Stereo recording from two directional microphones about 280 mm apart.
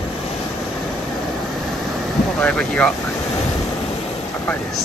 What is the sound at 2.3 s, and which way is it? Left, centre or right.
Speech, centre.